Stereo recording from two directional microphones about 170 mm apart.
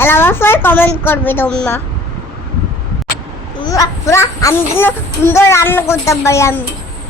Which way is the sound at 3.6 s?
20° left (ahead or behind).